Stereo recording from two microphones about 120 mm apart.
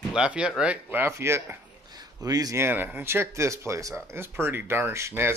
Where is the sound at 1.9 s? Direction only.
30° right (ahead or behind).